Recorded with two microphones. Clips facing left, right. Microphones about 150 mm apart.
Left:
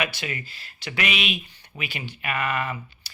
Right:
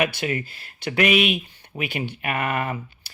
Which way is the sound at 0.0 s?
50° right (ahead or behind).